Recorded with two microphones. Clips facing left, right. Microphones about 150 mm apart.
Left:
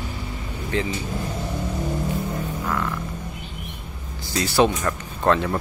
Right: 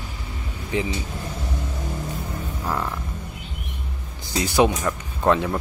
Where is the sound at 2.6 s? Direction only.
30° right (ahead or behind).